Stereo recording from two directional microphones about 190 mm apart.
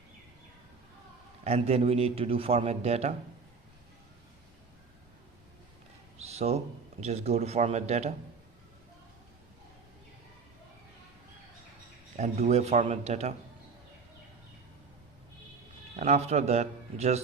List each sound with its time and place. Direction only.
1.5 s a man's voice: 30° right (ahead or behind)
6.1 s a sound: 35° right (ahead or behind)
7.0 s a man's voice: 35° right (ahead or behind)
12.1 s a man's voice: 35° right (ahead or behind)
16.0 s a man's voice: 35° right (ahead or behind)